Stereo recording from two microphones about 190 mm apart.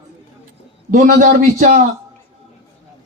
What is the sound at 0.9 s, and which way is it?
Speech, 40° right (ahead or behind).